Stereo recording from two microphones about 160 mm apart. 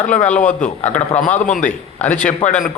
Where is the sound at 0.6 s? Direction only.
50° left (ahead or behind).